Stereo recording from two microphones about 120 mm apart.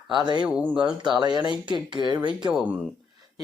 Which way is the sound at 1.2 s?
35° right (ahead or behind).